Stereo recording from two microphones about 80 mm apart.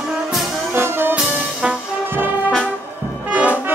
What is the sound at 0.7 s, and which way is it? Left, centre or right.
Music, right.